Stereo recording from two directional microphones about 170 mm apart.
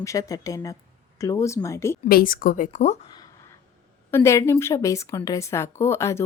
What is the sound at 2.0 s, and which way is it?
Speech, 60° left (ahead or behind).